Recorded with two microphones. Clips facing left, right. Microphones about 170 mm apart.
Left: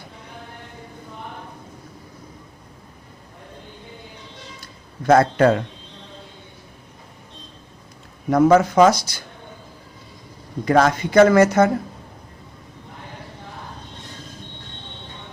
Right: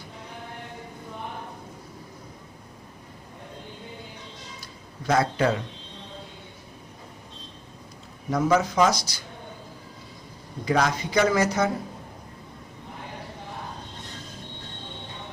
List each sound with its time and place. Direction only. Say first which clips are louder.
4.6 s speech: left 9 dB; 55° left (ahead or behind)
8.3 s speech: left 8 dB; 55° left (ahead or behind)
10.7 s speech: left 7 dB; 55° left (ahead or behind)